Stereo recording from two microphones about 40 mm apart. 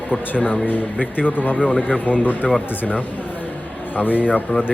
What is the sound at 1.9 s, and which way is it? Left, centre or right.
Speech, right.